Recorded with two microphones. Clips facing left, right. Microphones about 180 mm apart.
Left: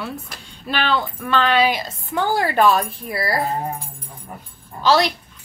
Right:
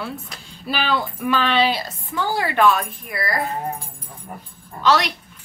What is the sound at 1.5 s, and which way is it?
Speech, 10° left (ahead or behind).